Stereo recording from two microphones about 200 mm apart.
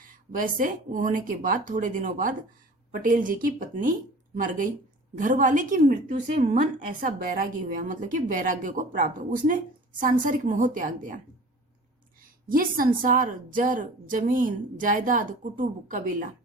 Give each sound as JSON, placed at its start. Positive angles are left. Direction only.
{"t": 0.3, "sound": "a woman's voice", "side_deg": -45}
{"t": 12.5, "sound": "a woman's voice", "side_deg": -45}